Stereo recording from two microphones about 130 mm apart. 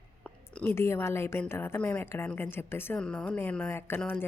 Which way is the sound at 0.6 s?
20° left (ahead or behind).